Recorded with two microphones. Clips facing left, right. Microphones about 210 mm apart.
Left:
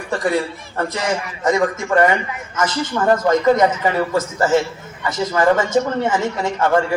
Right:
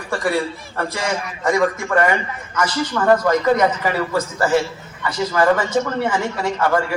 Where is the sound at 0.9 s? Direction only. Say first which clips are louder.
Left 2 dB; 20° left (ahead or behind).